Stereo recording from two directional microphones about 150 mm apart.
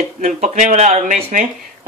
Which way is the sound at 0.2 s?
55° right (ahead or behind).